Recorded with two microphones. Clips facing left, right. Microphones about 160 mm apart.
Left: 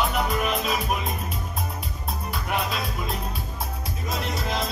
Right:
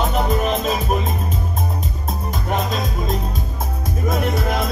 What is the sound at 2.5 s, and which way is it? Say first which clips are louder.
Music: right 5 dB; 45° right (ahead or behind).